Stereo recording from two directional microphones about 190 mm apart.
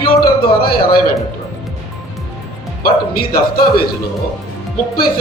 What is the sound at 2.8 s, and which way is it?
A man's voice, 50° left (ahead or behind).